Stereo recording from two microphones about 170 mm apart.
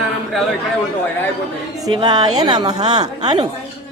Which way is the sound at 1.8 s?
25° right (ahead or behind).